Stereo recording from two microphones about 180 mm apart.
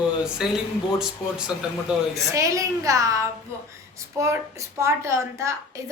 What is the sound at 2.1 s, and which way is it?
A child's voice, 15° right (ahead or behind).